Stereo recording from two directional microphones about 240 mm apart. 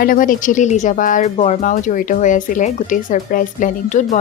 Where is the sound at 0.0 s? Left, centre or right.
Left.